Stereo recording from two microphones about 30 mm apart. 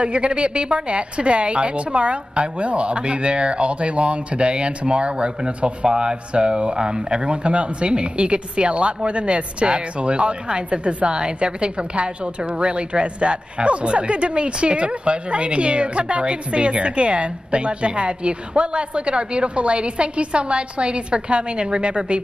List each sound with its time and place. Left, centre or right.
0.0 s a woman's voice: right
5.9 s a woman's voice: right
11.1 s a woman's voice: right